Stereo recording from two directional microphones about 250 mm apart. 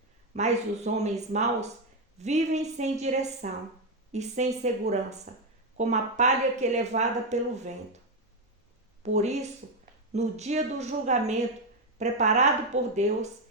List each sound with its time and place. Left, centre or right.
0.3 s a woman's voice: right
9.0 s a woman's voice: right